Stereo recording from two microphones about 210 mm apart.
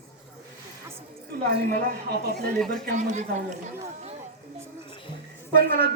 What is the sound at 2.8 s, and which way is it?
Speech, 35° right (ahead or behind).